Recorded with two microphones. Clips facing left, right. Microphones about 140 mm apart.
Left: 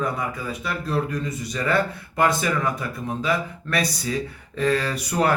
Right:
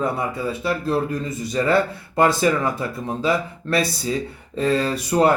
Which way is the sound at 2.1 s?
30° right (ahead or behind).